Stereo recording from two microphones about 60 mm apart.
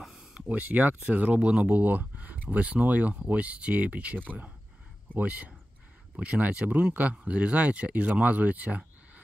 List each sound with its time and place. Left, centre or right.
0.3 s speech: right